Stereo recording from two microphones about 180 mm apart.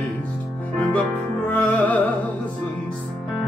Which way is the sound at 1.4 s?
10° left (ahead or behind).